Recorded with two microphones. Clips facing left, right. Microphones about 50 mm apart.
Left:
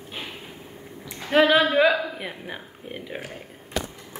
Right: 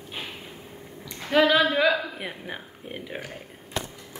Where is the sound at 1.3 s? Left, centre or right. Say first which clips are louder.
Left 2 dB; left.